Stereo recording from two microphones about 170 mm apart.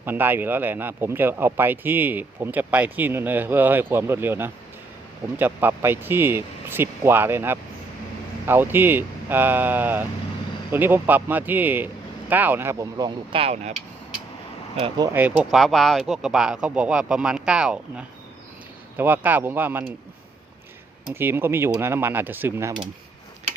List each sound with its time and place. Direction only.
0.0 s speech: 10° right (ahead or behind); by 13.7 s 40° right (ahead or behind)
14.8 s speech: 30° right (ahead or behind)
15.1 s speech: 10° right (ahead or behind)
15.4 s speech: centre (ahead or behind)
21.0 s speech: 15° right (ahead or behind)